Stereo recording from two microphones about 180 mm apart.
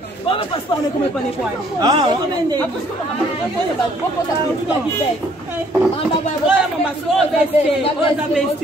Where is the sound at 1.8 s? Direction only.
25° right (ahead or behind).